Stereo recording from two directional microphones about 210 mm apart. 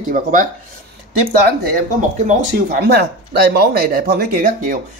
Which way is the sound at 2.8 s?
50° right (ahead or behind).